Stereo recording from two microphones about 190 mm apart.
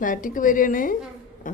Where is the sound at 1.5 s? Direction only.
45° left (ahead or behind).